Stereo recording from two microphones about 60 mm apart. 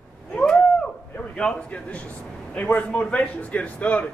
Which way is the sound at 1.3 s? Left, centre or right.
Centre.